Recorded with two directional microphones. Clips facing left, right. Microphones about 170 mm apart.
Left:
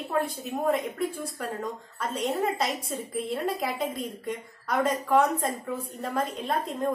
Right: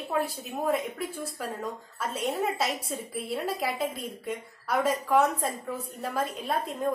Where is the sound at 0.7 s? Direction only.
5° right (ahead or behind).